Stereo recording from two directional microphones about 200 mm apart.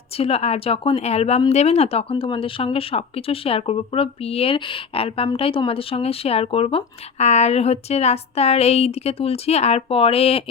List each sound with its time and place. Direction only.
0.2 s speech: 30° left (ahead or behind)